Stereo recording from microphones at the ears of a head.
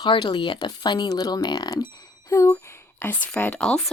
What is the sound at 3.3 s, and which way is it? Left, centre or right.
Speech, centre.